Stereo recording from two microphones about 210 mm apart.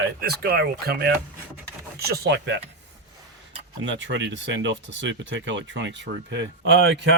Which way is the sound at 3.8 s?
60° right (ahead or behind).